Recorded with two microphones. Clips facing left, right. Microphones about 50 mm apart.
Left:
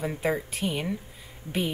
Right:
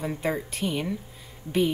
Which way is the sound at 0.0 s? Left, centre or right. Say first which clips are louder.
Left 1 dB; centre.